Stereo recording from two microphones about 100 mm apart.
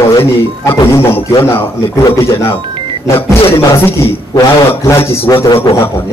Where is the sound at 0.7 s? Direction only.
30° left (ahead or behind).